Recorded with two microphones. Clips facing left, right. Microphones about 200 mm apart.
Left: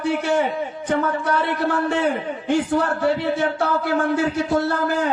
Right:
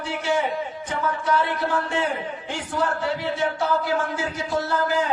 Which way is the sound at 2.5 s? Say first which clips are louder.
Left 7 dB; 60° left (ahead or behind).